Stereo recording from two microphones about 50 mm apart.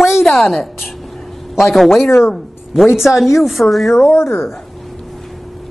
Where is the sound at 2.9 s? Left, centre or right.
Centre.